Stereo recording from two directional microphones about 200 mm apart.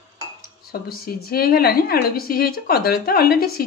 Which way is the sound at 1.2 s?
50° left (ahead or behind).